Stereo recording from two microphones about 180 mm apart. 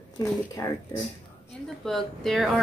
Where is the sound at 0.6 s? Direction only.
20° left (ahead or behind).